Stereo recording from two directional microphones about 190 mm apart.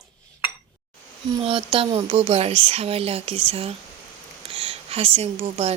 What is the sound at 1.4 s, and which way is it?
Speech, 30° right (ahead or behind).